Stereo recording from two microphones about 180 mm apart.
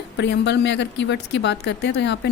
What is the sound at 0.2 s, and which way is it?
A woman's voice, 75° left (ahead or behind).